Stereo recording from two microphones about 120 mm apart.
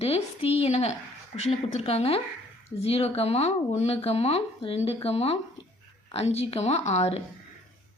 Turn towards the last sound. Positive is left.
turn(degrees=65)  # may be behind; listen again after turning